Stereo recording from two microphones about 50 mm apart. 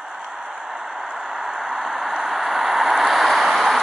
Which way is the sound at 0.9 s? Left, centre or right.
Centre.